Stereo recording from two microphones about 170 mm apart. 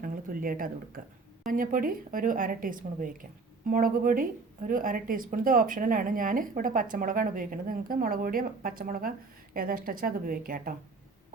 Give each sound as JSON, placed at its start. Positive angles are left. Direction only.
{"t": 0.0, "sound": "a woman's voice", "side_deg": -55}